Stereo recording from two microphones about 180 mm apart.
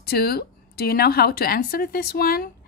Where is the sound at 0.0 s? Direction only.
60° left (ahead or behind).